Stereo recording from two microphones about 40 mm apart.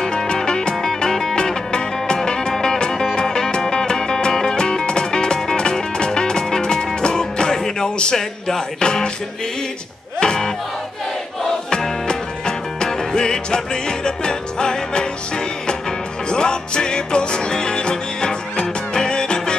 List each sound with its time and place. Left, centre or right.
0.0 s music: centre
10.2 s music: centre